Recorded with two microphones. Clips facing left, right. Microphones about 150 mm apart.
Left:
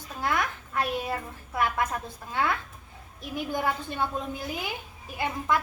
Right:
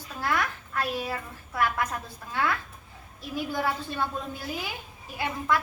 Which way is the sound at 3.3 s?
20° left (ahead or behind).